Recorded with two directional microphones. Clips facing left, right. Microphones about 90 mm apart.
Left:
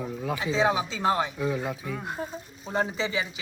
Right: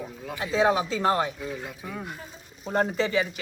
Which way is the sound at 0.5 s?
Centre (ahead or behind).